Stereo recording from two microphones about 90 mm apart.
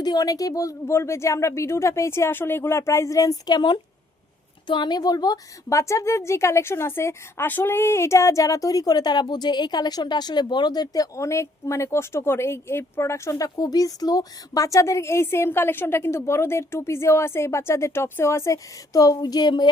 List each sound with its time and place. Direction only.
0.0 s a woman's voice: 50° left (ahead or behind)
5.6 s a woman's voice: 35° left (ahead or behind)
13.6 s a woman's voice: 45° left (ahead or behind)